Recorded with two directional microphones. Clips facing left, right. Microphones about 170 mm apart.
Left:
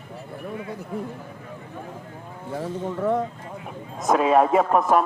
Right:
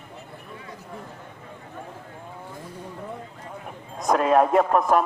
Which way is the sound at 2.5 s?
90° left.